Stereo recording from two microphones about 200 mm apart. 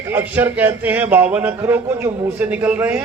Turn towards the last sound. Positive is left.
turn(degrees=-10)  # may be behind; listen again after turning